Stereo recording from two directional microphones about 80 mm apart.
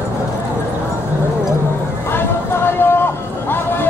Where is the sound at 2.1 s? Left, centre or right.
Left.